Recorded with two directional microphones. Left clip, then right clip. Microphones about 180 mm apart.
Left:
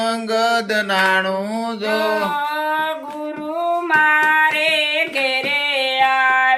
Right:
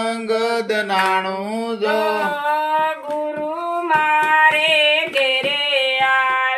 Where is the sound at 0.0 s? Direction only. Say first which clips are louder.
Left 2 dB; 35° left (ahead or behind).